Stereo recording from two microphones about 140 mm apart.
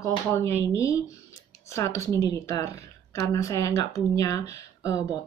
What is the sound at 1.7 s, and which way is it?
Speech, 20° left (ahead or behind).